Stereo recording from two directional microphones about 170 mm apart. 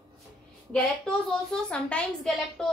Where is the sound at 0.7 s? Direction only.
5° left (ahead or behind).